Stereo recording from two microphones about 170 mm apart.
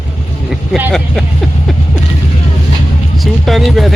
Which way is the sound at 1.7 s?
Centre (ahead or behind).